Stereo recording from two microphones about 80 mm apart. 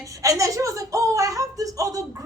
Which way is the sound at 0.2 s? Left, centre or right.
Right.